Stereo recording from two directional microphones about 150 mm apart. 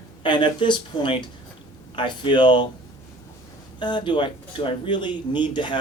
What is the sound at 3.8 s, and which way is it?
Speech, 30° left (ahead or behind).